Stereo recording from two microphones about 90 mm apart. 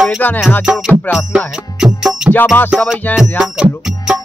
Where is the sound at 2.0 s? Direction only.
5° right (ahead or behind).